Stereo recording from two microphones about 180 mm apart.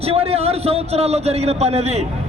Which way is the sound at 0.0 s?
35° right (ahead or behind).